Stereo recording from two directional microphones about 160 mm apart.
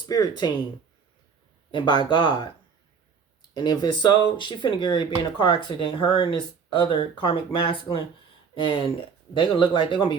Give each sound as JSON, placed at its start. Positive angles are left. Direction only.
{"t": 0.1, "sound": "speech", "side_deg": 25}
{"t": 1.7, "sound": "speech", "side_deg": 30}
{"t": 3.5, "sound": "speech", "side_deg": 25}